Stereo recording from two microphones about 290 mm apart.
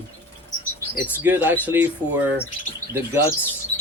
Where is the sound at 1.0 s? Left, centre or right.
Centre.